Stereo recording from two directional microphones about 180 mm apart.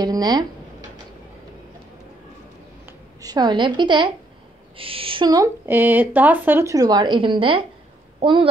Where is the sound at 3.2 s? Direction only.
20° right (ahead or behind).